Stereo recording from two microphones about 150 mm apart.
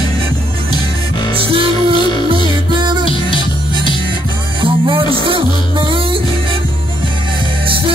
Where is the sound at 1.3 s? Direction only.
35° right (ahead or behind).